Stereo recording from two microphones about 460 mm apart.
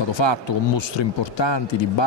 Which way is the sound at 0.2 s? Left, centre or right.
Left.